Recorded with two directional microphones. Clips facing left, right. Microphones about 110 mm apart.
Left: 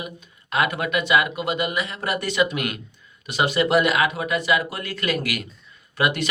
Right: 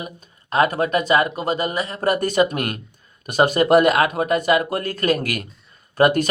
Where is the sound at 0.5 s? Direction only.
35° right (ahead or behind).